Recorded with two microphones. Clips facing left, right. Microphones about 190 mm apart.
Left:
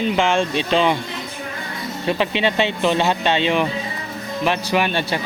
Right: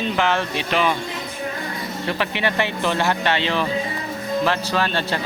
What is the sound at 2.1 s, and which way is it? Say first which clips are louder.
Speech: left 4 dB; 20° left (ahead or behind).